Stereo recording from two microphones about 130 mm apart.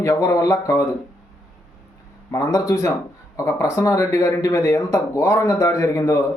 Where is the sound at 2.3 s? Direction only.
30° left (ahead or behind).